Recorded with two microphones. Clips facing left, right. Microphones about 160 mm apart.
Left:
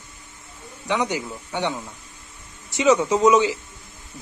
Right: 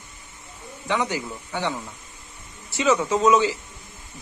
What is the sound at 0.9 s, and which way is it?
A man's voice, 20° left (ahead or behind).